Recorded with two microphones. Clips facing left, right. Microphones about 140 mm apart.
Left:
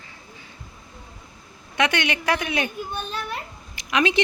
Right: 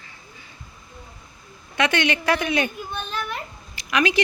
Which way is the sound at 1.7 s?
15° left (ahead or behind).